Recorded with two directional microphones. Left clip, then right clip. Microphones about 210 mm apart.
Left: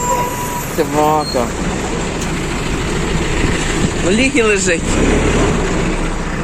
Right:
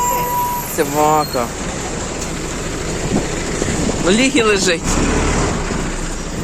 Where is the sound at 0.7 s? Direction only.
5° right (ahead or behind).